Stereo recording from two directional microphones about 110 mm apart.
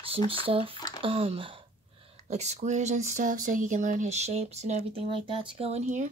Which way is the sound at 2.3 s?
90° right.